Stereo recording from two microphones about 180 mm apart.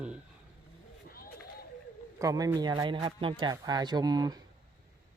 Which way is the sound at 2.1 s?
20° right (ahead or behind).